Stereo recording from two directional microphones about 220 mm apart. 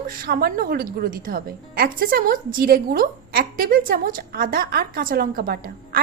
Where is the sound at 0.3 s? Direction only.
40° right (ahead or behind).